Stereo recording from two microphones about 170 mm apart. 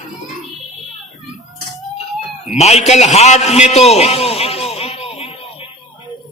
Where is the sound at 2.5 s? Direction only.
40° left (ahead or behind).